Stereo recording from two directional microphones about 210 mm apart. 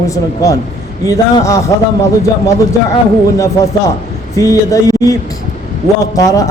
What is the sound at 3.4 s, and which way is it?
A man's voice, 15° left (ahead or behind).